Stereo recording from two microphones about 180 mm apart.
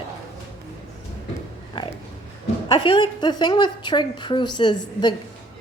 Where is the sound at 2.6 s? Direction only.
25° left (ahead or behind).